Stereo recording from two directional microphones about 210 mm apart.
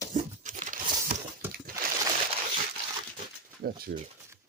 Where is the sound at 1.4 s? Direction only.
10° right (ahead or behind).